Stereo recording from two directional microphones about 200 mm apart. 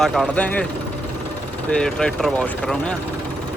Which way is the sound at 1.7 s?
5° left (ahead or behind).